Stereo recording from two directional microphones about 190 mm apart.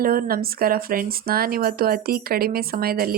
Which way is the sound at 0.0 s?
50° right (ahead or behind).